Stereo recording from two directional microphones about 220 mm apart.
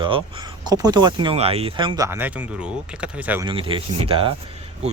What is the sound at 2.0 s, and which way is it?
Speech, 10° right (ahead or behind).